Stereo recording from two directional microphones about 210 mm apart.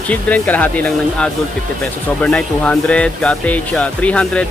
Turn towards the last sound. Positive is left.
turn(degrees=5)  # may be behind; listen again after turning